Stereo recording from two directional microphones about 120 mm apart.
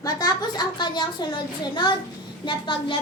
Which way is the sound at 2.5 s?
45° left (ahead or behind).